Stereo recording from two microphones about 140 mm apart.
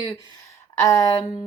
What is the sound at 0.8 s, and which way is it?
Speech, 25° left (ahead or behind).